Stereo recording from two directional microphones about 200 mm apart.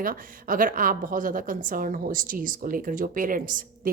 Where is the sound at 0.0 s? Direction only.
45° right (ahead or behind).